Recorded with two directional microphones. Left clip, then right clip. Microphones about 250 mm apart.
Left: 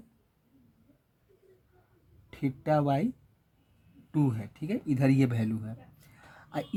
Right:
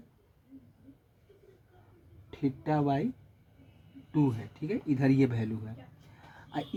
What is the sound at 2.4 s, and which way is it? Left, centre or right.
Speech, left.